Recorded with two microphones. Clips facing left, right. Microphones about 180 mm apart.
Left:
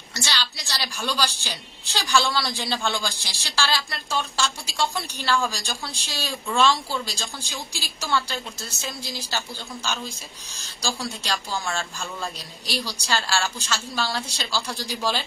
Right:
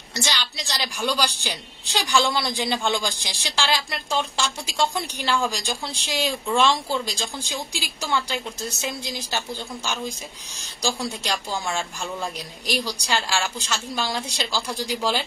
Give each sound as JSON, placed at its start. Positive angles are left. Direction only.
{"t": 0.1, "sound": "a woman's voice", "side_deg": -15}